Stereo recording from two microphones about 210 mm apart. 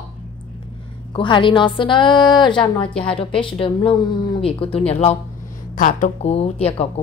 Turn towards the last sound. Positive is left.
turn(degrees=30)  # may be behind; listen again after turning